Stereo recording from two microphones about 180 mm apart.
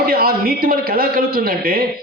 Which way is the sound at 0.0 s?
55° right (ahead or behind).